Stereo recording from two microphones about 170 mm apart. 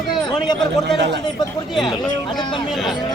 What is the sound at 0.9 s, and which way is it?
Speech, 90° right.